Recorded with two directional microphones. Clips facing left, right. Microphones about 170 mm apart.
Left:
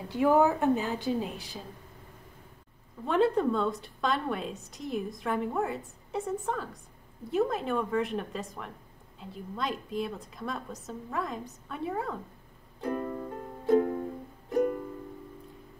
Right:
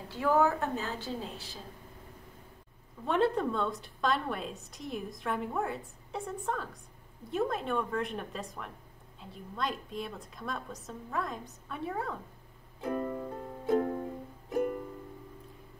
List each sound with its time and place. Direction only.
0.1 s a woman's voice: 15° left (ahead or behind)
3.1 s a woman's voice: centre (ahead or behind)
12.8 s music: 5° right (ahead or behind)